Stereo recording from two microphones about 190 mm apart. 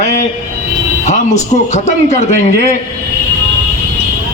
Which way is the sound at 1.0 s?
40° left (ahead or behind).